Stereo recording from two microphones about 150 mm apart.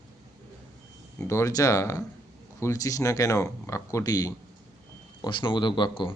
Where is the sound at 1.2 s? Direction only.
20° left (ahead or behind).